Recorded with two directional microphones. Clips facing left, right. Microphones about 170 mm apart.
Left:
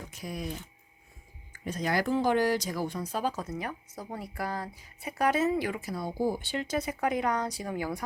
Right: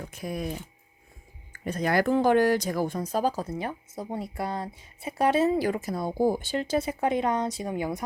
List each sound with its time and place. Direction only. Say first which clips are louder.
0.1 s speech: right 5 dB; 55° right (ahead or behind)
1.5 s speech: right 5 dB; 55° right (ahead or behind); by 8.0 s 20° right (ahead or behind)